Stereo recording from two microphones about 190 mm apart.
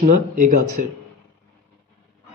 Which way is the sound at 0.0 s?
40° right (ahead or behind).